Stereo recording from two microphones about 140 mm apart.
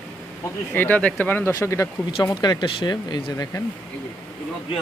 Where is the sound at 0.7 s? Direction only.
15° left (ahead or behind).